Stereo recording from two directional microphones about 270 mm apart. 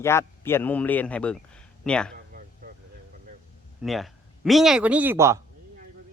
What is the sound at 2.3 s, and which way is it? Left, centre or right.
Chop, right.